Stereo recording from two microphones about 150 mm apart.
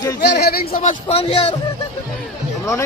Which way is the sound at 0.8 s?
50° left (ahead or behind).